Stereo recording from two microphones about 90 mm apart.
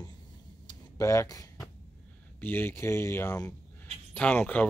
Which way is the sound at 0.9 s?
35° left (ahead or behind).